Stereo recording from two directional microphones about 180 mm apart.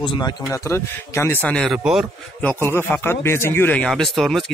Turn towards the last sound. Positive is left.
turn(degrees=0)  # may be behind; listen again after turning